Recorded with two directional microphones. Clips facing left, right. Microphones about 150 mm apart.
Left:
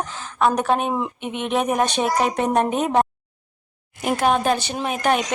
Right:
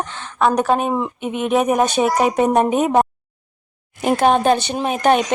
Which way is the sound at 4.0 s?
30° right (ahead or behind).